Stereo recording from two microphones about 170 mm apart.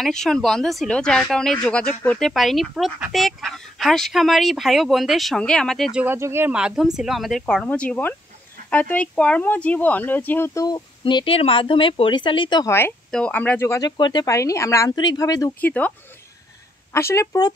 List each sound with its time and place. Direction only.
0.0 s speech: 5° left (ahead or behind); by 12.7 s 25° left (ahead or behind)
13.1 s speech: 5° left (ahead or behind)
15.6 s speech: 10° left (ahead or behind)
16.9 s speech: 15° left (ahead or behind)